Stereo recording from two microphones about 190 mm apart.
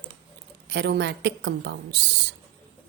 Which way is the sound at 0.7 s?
65° right (ahead or behind).